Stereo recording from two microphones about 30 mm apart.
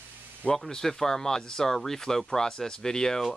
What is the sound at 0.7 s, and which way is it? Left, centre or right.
Speech, centre.